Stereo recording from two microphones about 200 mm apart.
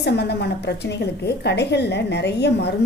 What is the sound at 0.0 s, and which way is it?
A woman's voice, 55° left (ahead or behind).